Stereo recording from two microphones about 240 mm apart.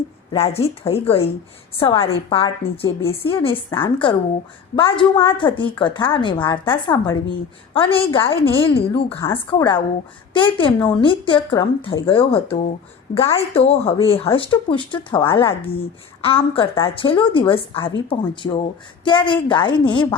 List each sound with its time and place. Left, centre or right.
0.3 s speech: left
9.1 s a woman's voice: centre